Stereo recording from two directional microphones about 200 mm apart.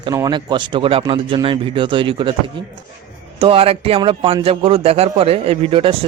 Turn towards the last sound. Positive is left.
turn(degrees=-25)  # may be behind; listen again after turning